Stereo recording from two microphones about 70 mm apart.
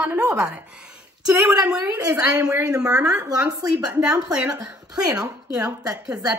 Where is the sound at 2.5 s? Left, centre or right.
Right.